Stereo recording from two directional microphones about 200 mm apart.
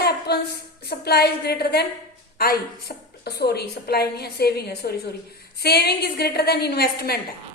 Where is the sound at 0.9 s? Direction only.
55° left (ahead or behind).